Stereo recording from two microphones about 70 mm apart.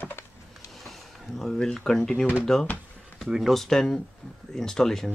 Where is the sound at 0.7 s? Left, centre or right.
Centre.